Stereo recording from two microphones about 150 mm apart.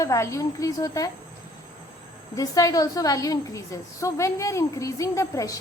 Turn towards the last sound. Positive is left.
turn(degrees=20)  # may be behind; listen again after turning